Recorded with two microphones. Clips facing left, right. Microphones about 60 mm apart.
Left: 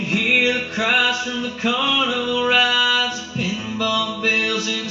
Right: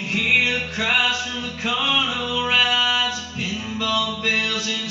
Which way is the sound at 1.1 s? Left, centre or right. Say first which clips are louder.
Left 3 dB; centre.